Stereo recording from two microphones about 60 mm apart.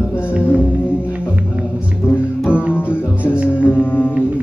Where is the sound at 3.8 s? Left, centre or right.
Left.